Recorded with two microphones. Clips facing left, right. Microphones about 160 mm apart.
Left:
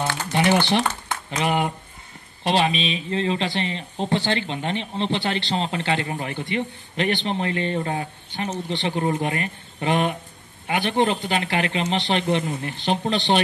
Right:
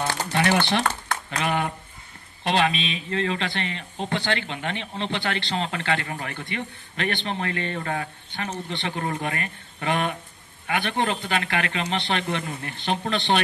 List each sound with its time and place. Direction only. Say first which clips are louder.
0.3 s speech: left 3 dB; 20° left (ahead or behind)
1.0 s a sound: left 2 dB; 20° left (ahead or behind)
2.4 s speech: left 2 dB; 20° left (ahead or behind)